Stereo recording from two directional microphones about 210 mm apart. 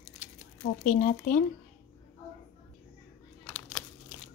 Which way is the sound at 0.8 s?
40° left (ahead or behind).